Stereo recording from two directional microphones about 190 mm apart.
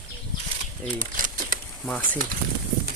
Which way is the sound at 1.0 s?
45° right (ahead or behind).